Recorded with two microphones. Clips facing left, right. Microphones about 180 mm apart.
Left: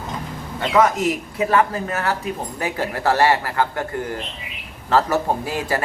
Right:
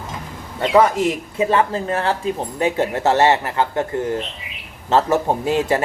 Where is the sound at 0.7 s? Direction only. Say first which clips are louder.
Right 2 dB; 30° right (ahead or behind).